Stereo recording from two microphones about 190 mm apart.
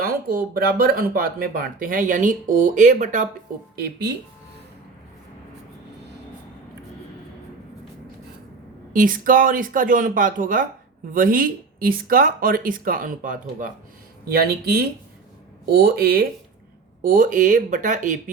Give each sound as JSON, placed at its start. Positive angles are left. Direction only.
{"t": 0.0, "sound": "speech", "side_deg": -50}
{"t": 3.8, "sound": "speech", "side_deg": -55}
{"t": 8.9, "sound": "speech", "side_deg": -45}
{"t": 14.3, "sound": "speech", "side_deg": -55}